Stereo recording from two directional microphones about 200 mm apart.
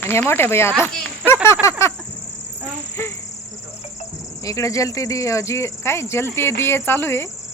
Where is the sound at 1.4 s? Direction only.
15° left (ahead or behind).